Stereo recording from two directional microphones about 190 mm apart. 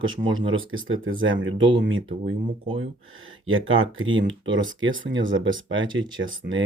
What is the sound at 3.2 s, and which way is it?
Speech, 90° right.